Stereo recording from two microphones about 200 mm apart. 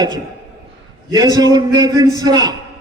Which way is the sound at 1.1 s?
20° right (ahead or behind).